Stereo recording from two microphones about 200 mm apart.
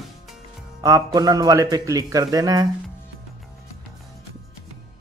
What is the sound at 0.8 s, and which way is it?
A man's voice, 15° right (ahead or behind).